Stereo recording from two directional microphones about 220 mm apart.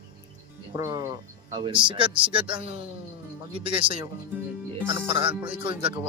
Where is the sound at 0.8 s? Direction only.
15° right (ahead or behind).